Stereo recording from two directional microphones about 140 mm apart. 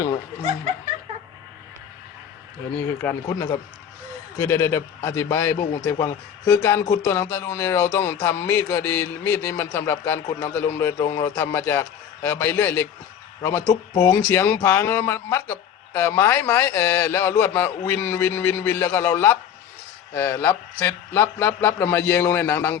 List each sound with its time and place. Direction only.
3.2 s a man's voice: 25° left (ahead or behind)